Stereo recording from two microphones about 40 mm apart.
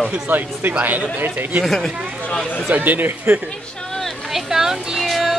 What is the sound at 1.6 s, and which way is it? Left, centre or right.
Speech, centre.